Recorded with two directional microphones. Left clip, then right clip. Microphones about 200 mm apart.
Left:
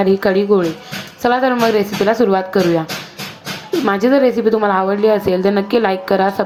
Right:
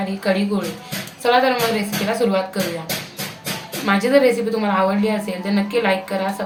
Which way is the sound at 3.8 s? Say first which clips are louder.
Left 2 dB; 40° left (ahead or behind).